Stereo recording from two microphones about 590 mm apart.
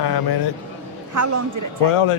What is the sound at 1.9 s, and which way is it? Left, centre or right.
Speech, left.